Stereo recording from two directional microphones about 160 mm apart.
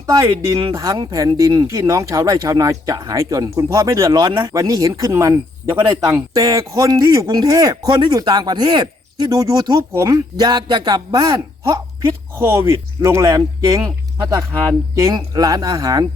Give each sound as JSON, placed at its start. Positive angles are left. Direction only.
{"t": 0.0, "sound": "speech", "side_deg": -25}